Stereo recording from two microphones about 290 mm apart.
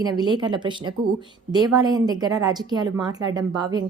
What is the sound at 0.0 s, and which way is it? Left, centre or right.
A woman's voice, centre.